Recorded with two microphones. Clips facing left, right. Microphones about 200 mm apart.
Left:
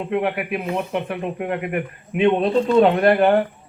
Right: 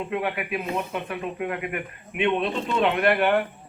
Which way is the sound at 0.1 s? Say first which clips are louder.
Left 8 dB; 50° left (ahead or behind).